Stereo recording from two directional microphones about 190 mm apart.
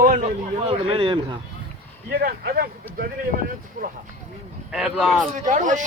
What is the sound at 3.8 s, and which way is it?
Speech, 45° right (ahead or behind).